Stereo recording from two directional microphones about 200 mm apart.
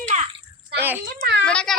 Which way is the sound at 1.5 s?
5° left (ahead or behind).